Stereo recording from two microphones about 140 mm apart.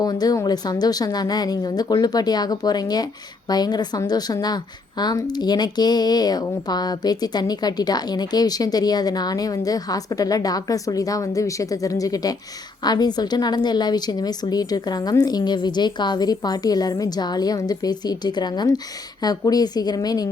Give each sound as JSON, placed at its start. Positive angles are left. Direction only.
{"t": 0.0, "sound": "a woman's voice", "side_deg": 25}